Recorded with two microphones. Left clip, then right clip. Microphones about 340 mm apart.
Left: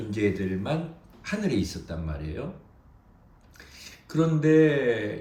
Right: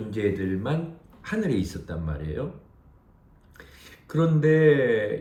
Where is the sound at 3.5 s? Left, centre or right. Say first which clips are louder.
Left 1 dB; centre.